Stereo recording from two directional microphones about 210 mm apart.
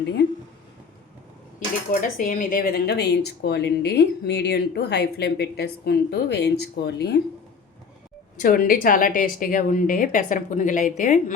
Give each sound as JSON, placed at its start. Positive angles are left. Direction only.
{"t": 0.2, "sound": "speech", "side_deg": 55}
{"t": 1.5, "sound": "speech", "side_deg": 40}
{"t": 8.4, "sound": "a woman's voice", "side_deg": 40}